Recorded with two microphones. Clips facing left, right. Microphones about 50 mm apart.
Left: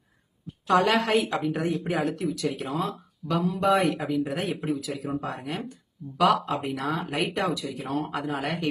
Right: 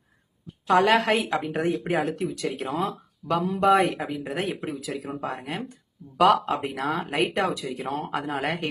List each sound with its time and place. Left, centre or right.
0.8 s speech: right
4.8 s speech: right
6.1 s speech: right